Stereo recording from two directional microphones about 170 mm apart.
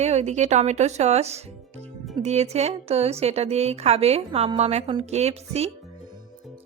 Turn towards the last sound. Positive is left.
turn(degrees=-40)  # may be behind; listen again after turning